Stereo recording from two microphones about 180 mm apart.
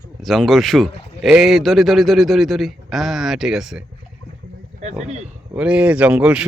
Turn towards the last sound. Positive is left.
turn(degrees=-5)  # may be behind; listen again after turning